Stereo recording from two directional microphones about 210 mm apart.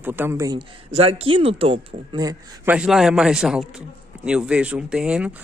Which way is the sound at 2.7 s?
Centre (ahead or behind).